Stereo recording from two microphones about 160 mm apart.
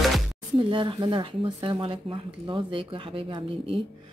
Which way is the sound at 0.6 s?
30° right (ahead or behind).